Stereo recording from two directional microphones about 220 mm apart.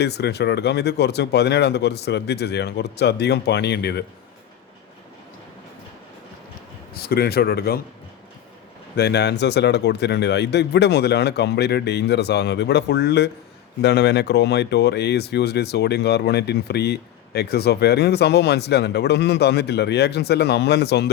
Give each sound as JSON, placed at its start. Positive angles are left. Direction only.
{"t": 0.0, "sound": "speech", "side_deg": 50}
{"t": 6.9, "sound": "speech", "side_deg": 45}
{"t": 9.0, "sound": "speech", "side_deg": 50}